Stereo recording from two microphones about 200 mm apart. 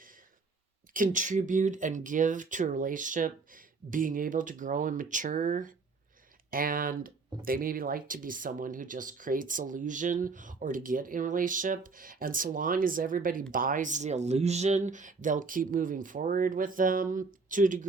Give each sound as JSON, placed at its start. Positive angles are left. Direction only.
{"t": 0.9, "sound": "speech", "side_deg": -40}